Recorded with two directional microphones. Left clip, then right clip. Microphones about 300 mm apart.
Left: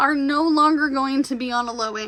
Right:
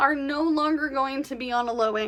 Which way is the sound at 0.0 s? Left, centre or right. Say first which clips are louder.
Left 4 dB; centre.